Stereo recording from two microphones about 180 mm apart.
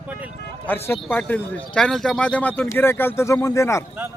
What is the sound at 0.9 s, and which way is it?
Speech, 10° left (ahead or behind).